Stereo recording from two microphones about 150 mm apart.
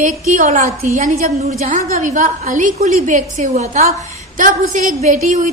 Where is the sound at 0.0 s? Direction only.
60° right (ahead or behind).